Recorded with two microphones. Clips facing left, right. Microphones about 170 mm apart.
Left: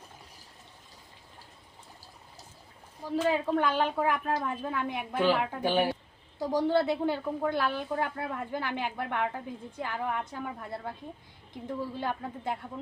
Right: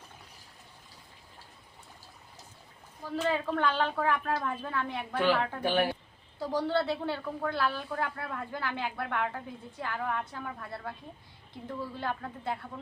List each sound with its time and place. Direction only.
3.0 s a woman's voice: 15° left (ahead or behind)